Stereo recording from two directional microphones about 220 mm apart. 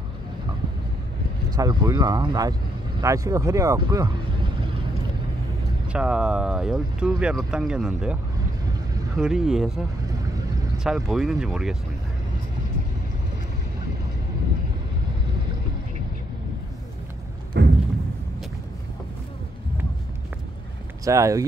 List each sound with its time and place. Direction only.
1.6 s speech: 20° right (ahead or behind)
5.9 s speech: 5° right (ahead or behind)
17.6 s a sound: 50° right (ahead or behind)
21.0 s speech: 15° right (ahead or behind)